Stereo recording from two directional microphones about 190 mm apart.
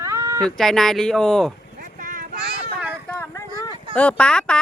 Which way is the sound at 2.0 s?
45° right (ahead or behind).